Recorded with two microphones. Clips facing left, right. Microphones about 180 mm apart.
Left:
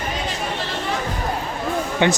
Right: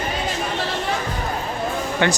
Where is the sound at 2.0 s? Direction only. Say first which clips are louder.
Left 2 dB; 20° left (ahead or behind).